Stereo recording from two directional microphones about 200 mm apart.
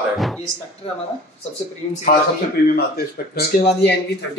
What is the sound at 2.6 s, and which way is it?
Speech, 50° left (ahead or behind).